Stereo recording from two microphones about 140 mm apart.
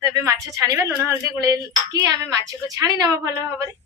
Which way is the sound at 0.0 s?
25° right (ahead or behind).